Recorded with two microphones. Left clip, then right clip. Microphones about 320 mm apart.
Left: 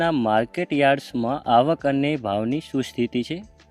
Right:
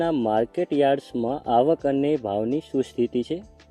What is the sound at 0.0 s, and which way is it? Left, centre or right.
Speech, left.